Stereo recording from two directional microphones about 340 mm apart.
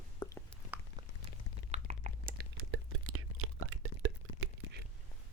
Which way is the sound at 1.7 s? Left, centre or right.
Right.